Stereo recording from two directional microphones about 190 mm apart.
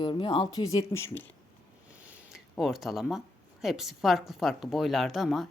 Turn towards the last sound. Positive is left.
turn(degrees=0)  # may be behind; listen again after turning